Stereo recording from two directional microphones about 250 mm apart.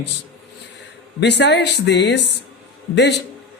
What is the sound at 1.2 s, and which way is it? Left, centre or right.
Speech, left.